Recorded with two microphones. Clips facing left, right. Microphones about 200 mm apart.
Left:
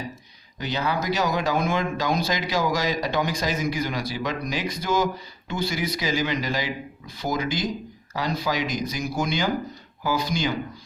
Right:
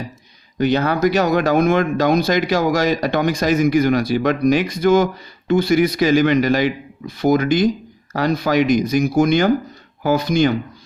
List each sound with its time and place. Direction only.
0.6 s speech: 60° right (ahead or behind)